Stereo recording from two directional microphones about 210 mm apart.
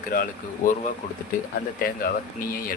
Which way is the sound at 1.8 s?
45° left (ahead or behind).